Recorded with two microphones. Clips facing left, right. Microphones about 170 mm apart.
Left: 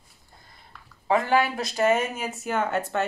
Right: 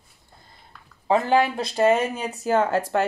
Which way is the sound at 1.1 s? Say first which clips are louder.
Right 3 dB; 30° right (ahead or behind).